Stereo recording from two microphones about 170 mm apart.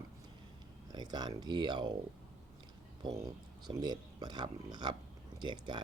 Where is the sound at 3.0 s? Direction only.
25° right (ahead or behind).